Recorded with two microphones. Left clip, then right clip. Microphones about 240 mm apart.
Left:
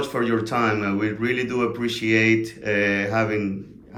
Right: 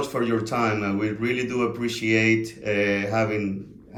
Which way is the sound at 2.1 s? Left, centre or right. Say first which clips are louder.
Left 2 dB; left.